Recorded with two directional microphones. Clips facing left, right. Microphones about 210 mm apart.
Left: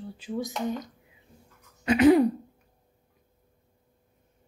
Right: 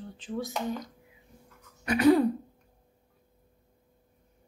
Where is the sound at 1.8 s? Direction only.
20° left (ahead or behind).